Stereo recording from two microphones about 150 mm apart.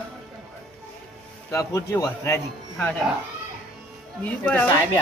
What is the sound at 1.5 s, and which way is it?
Speech, 20° left (ahead or behind).